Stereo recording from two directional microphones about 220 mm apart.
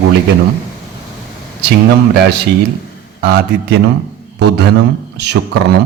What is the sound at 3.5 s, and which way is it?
A man's voice, 50° right (ahead or behind).